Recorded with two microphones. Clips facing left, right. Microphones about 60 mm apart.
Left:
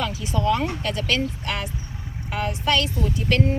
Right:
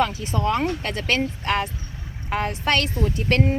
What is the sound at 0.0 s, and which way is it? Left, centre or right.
Speech, right.